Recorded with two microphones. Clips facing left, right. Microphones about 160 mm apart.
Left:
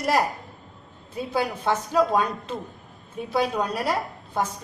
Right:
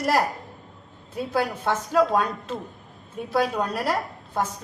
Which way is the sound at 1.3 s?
Centre (ahead or behind).